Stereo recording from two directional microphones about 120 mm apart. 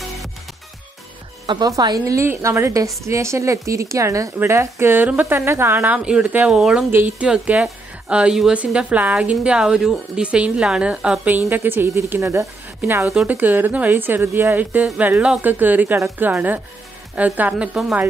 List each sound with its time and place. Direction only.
1.4 s a woman's voice: 35° right (ahead or behind); by 5.9 s 20° right (ahead or behind)
5.9 s a woman's voice: 10° right (ahead or behind)
6.9 s a woman's voice: 20° right (ahead or behind)
13.1 s a woman's voice: 10° right (ahead or behind)